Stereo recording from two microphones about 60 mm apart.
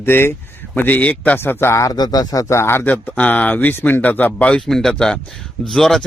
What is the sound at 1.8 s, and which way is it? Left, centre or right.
Speech, left.